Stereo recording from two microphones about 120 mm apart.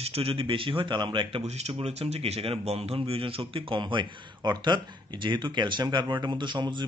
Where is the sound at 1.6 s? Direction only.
60° right (ahead or behind); by 6.9 s 40° right (ahead or behind).